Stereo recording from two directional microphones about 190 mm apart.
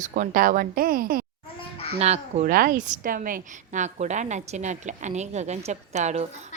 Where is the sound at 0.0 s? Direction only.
45° right (ahead or behind).